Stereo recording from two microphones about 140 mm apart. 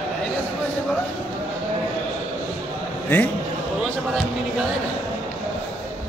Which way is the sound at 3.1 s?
15° left (ahead or behind).